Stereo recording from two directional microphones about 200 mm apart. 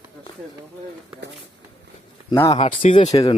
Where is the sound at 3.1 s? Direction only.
20° left (ahead or behind).